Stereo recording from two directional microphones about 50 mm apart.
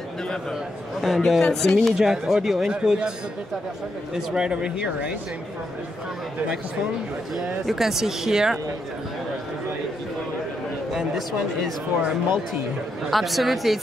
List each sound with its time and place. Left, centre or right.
1.0 s speech: centre
2.0 s speech: centre
4.1 s speech: centre
7.6 s speech: centre
10.9 s speech: centre
13.0 s speech: centre